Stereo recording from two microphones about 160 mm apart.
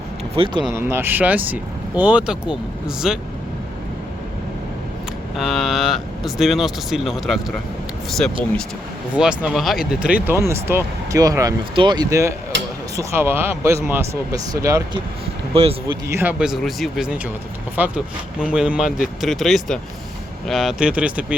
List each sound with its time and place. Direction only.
0.3 s speech: 35° right (ahead or behind)
0.7 s speech: 15° right (ahead or behind)
5.4 s speech: centre (ahead or behind)
9.1 s speech: 5° right (ahead or behind)
15.5 s speech: 35° right (ahead or behind)
16.1 s speech: 10° right (ahead or behind)